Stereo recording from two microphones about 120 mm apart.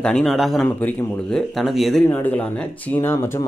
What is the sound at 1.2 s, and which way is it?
Speech, 5° left (ahead or behind).